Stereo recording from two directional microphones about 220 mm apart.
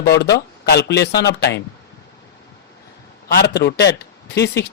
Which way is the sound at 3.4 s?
50° left (ahead or behind).